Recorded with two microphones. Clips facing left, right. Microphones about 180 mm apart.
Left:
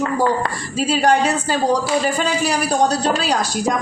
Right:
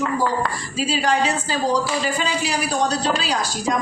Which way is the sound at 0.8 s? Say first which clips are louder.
Left 4 dB; 50° left (ahead or behind).